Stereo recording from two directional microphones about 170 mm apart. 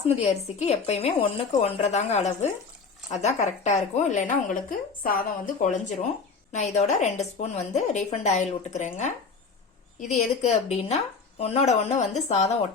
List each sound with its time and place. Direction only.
0.1 s a woman's voice: 40° left (ahead or behind)